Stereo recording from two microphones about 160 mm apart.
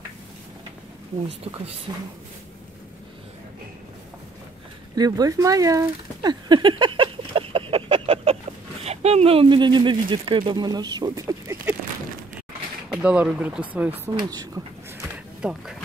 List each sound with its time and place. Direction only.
1.9 s speech: 25° right (ahead or behind)
4.9 s a sound: 25° right (ahead or behind)
8.8 s speech: 40° right (ahead or behind); by 11.5 s 20° right (ahead or behind)
12.9 s speech: 5° right (ahead or behind)
14.1 s speech: 25° right (ahead or behind)
15.4 s speech: 5° right (ahead or behind)